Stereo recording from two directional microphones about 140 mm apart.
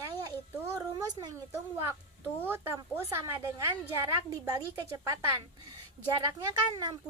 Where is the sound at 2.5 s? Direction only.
15° right (ahead or behind).